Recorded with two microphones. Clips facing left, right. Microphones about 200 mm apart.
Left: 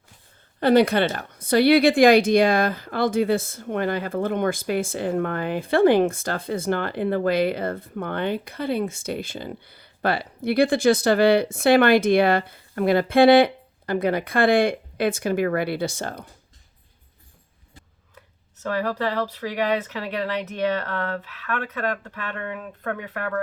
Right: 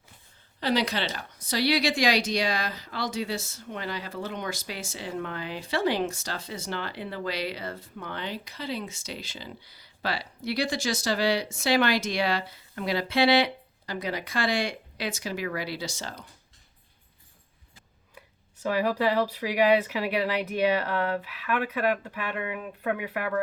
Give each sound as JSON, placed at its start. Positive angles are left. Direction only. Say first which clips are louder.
{"t": 0.6, "sound": "a woman's voice", "louder": "left 10 dB", "side_deg": 55}
{"t": 18.1, "sound": "speech", "louder": "even", "side_deg": -10}